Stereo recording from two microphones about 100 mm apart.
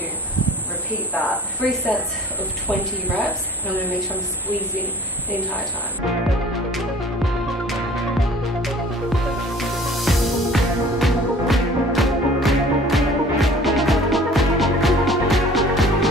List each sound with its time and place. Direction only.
0.4 s a sound: 15° left (ahead or behind)
1.1 s a woman's voice: 15° right (ahead or behind)
2.7 s speech: 15° left (ahead or behind)
3.8 s a woman's voice: 15° right (ahead or behind)
9.6 s music: centre (ahead or behind)